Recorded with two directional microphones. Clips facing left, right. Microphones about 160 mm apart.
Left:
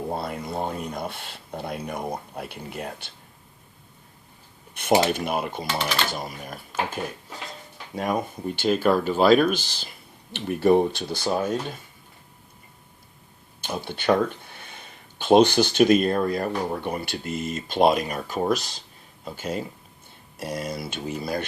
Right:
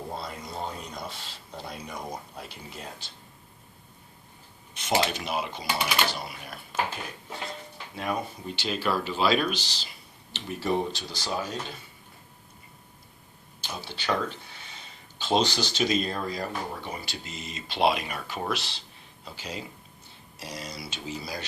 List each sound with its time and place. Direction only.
0.1 s speech: 55° left (ahead or behind)
5.0 s speech: 50° left (ahead or behind)
7.9 s speech: 45° left (ahead or behind)
13.6 s speech: 55° left (ahead or behind)